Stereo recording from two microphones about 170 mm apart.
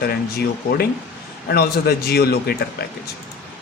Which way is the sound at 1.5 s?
65° left (ahead or behind).